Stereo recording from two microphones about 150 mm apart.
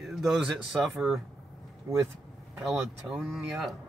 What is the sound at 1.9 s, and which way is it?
Speech, 20° right (ahead or behind).